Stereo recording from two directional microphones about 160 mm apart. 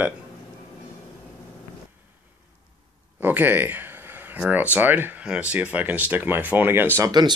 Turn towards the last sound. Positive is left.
turn(degrees=-25)  # may be behind; listen again after turning